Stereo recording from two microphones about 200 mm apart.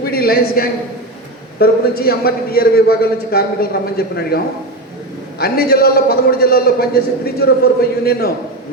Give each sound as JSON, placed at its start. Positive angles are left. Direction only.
{"t": 0.0, "sound": "a man's voice", "side_deg": 50}
{"t": 5.4, "sound": "a man's voice", "side_deg": 50}